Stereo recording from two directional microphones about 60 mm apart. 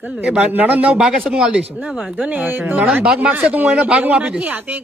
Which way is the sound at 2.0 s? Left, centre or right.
Right.